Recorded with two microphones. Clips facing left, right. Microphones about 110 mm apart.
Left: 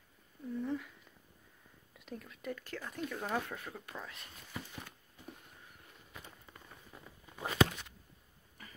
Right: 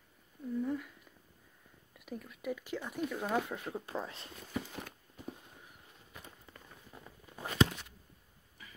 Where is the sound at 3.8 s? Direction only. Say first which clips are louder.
Right 7 dB; 30° right (ahead or behind).